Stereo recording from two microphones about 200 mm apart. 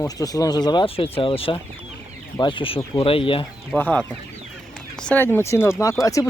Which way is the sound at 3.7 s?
5° left (ahead or behind).